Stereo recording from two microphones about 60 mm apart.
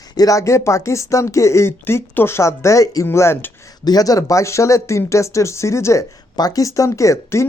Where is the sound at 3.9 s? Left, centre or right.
Left.